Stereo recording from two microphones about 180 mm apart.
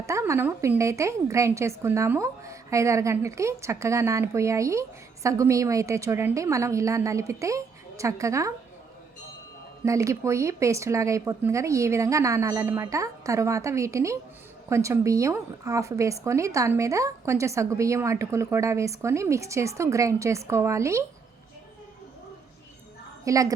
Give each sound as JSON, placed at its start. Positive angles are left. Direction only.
{"t": 0.0, "sound": "a woman's voice", "side_deg": -15}
{"t": 9.8, "sound": "a woman's voice", "side_deg": -15}
{"t": 23.2, "sound": "a woman's voice", "side_deg": -20}